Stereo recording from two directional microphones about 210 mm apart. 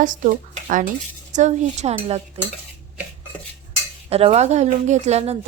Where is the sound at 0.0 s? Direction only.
40° right (ahead or behind).